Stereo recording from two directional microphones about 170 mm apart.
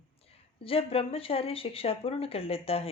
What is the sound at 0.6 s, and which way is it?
Speech, 35° left (ahead or behind).